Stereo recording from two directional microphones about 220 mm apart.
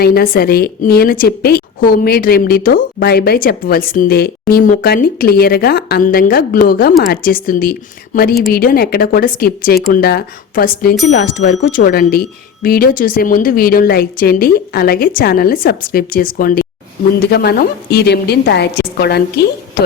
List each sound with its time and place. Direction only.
0.0 s a woman's voice: 45° left (ahead or behind)